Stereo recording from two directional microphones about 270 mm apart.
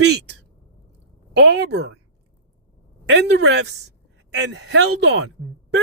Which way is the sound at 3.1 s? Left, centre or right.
Right.